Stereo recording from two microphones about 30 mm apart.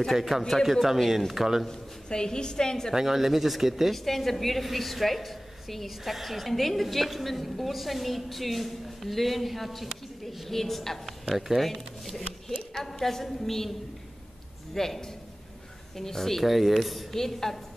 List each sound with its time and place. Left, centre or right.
0.3 s a woman's voice: centre
1.7 s a woman's voice: left
2.9 s speech: centre
3.9 s a woman's voice: centre
11.3 s speech: centre
11.6 s a woman's voice: centre
14.7 s a man's voice: centre
16.0 s a woman's voice: centre
16.4 s a woman's voice: centre
17.1 s a woman's voice: centre